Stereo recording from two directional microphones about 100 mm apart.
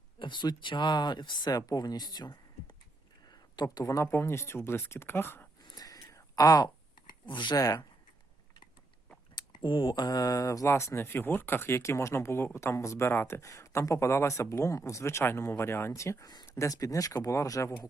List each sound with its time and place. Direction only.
0.2 s speech: 50° left (ahead or behind)
3.5 s speech: 50° left (ahead or behind)
3.8 s speech: 30° left (ahead or behind)
5.6 s a sound: 40° left (ahead or behind)
7.3 s speech: 50° left (ahead or behind)
9.6 s speech: 55° left (ahead or behind); by 17.7 s 30° left (ahead or behind)